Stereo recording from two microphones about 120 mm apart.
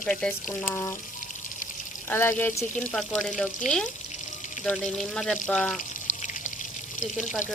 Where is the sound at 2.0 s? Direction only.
20° left (ahead or behind).